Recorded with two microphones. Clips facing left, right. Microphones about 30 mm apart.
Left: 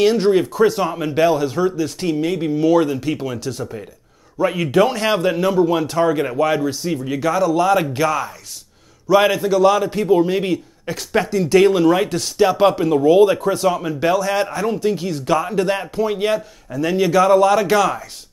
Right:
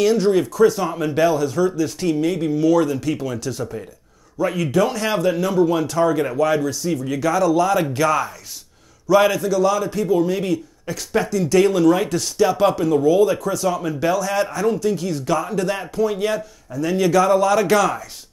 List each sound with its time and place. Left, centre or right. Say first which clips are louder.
0.0 s a man's voice: left 2 dB; left
0.9 s a man's voice: left 1 dB; centre
5.3 s a man's voice: left 2 dB; centre
9.1 s a man's voice: left 1 dB; centre; by 13.7 s left
13.7 s a man's voice: left 1 dB; left